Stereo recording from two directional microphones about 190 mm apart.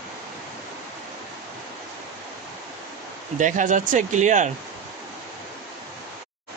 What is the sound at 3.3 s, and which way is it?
A man's voice, 40° right (ahead or behind).